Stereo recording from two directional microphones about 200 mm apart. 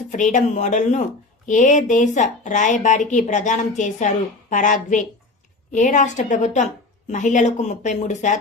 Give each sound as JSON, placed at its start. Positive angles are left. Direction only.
{"t": 0.1, "sound": "a woman's voice", "side_deg": 40}